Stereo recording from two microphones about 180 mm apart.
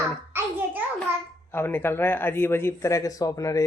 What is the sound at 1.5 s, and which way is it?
Speech, 10° left (ahead or behind).